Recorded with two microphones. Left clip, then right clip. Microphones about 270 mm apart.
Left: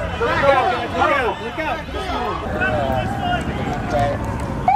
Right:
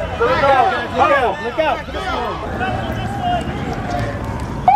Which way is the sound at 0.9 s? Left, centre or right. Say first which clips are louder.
Right 5 dB; right.